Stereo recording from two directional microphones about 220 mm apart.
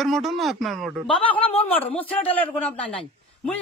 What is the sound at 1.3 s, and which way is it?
Speech, 25° left (ahead or behind).